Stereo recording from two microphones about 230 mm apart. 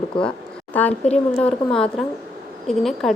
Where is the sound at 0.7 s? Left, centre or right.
Centre.